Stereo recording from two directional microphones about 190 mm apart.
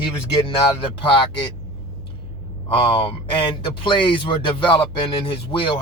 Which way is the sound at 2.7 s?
25° left (ahead or behind).